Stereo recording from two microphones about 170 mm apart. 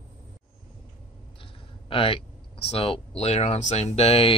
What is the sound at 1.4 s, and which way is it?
Speech, 30° left (ahead or behind).